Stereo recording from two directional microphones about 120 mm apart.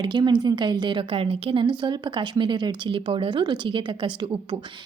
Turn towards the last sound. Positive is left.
turn(degrees=-40)  # may be behind; listen again after turning